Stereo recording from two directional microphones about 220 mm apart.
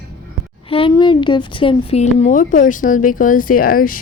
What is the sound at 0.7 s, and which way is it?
A woman's voice, 25° left (ahead or behind).